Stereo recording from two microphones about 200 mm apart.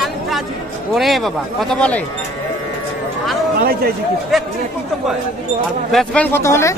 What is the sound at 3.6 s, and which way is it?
Speech, 50° right (ahead or behind).